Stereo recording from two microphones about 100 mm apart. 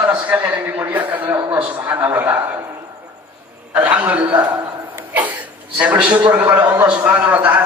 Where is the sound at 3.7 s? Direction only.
15° right (ahead or behind).